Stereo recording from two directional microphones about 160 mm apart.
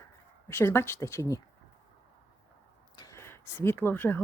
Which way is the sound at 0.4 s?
15° left (ahead or behind).